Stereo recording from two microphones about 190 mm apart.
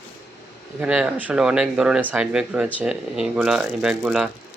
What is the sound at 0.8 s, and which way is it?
Speech, 5° right (ahead or behind).